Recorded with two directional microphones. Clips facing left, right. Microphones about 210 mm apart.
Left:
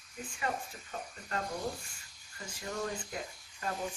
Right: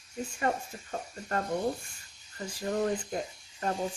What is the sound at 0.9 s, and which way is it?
Speech, 45° right (ahead or behind).